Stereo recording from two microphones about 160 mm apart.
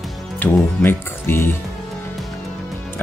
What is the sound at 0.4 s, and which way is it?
Speech, 15° left (ahead or behind).